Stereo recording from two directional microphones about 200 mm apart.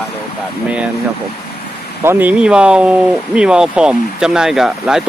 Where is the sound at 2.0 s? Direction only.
10° right (ahead or behind).